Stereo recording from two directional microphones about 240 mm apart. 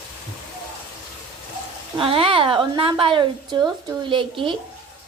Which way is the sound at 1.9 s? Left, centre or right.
Right.